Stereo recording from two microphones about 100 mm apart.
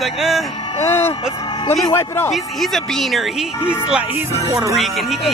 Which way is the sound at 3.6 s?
10° right (ahead or behind).